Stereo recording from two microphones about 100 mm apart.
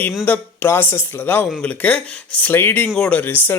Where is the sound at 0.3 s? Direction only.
20° left (ahead or behind).